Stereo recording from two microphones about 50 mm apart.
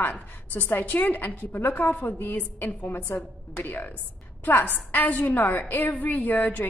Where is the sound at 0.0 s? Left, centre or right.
Left.